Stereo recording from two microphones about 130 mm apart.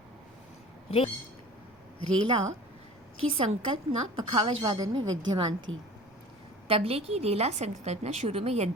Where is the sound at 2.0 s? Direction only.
45° right (ahead or behind).